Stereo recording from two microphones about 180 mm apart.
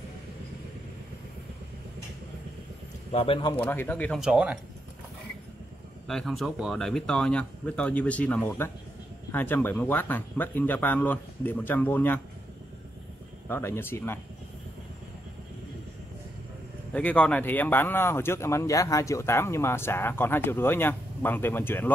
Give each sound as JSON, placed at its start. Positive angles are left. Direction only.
{"t": 3.1, "sound": "speech", "side_deg": 30}
{"t": 3.5, "sound": "speech", "side_deg": 10}
{"t": 4.2, "sound": "speech", "side_deg": -5}
{"t": 6.0, "sound": "speech", "side_deg": 0}
{"t": 13.5, "sound": "speech", "side_deg": 15}
{"t": 16.9, "sound": "speech", "side_deg": 10}